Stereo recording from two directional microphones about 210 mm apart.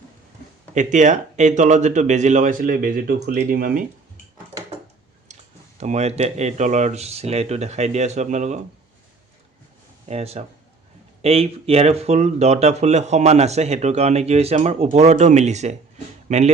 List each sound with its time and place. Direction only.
0.7 s speech: 35° right (ahead or behind)
5.3 s speech: 35° right (ahead or behind)
10.1 s speech: 30° right (ahead or behind)